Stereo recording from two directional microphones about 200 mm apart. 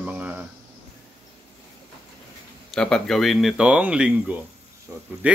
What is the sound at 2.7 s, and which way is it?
Speech, 5° left (ahead or behind).